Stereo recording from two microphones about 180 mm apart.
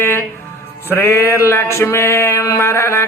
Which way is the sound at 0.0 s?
15° left (ahead or behind).